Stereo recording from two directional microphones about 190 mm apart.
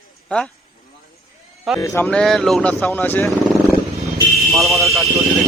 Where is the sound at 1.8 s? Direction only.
10° left (ahead or behind).